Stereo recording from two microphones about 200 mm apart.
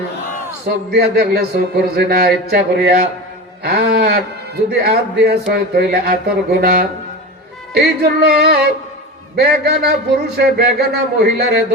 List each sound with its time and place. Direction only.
0.9 s a man's voice: 50° right (ahead or behind)